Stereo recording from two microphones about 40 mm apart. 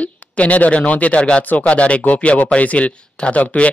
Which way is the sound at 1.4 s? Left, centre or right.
Left.